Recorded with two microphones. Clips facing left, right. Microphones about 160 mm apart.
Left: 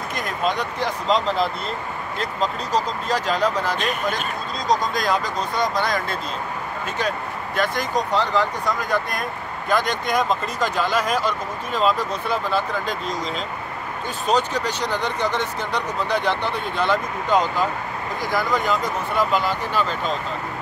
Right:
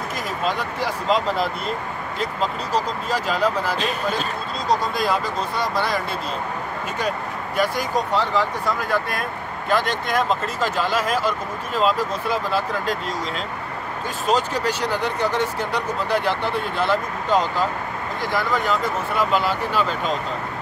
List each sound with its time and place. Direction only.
0.5 s speech: 5° right (ahead or behind)
3.7 s speech: 35° right (ahead or behind)
4.6 s speech: 5° right (ahead or behind)
14.2 s speech: 5° right (ahead or behind)